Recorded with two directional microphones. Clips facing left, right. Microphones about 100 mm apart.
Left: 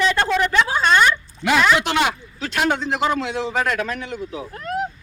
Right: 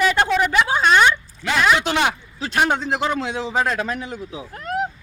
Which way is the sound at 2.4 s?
35° right (ahead or behind).